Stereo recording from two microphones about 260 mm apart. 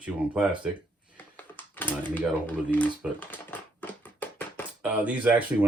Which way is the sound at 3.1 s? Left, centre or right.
Centre.